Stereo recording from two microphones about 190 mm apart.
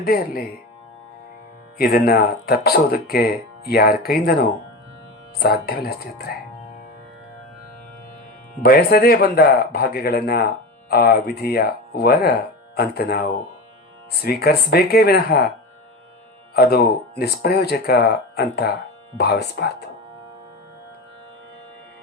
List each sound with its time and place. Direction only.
0.0 s speech: 50° left (ahead or behind)
1.8 s speech: 55° left (ahead or behind)
8.6 s speech: 55° left (ahead or behind)
16.6 s speech: 55° left (ahead or behind)